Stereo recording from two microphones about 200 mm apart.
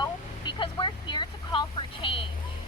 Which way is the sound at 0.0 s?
25° left (ahead or behind).